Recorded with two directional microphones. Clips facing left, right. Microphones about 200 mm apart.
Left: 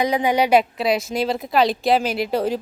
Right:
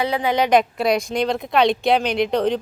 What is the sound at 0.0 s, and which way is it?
A woman's voice, 15° left (ahead or behind).